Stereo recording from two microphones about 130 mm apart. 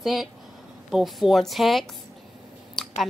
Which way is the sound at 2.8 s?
Centre (ahead or behind).